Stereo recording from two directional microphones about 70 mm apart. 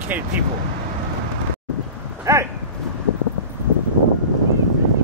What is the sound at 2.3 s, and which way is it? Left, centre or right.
Speech, right.